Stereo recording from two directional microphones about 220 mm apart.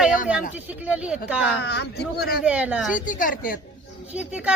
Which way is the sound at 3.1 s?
40° left (ahead or behind).